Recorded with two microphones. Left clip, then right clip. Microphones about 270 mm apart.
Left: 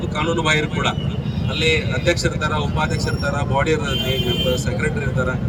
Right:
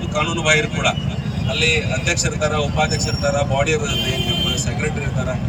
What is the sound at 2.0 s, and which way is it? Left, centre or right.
Speech, centre.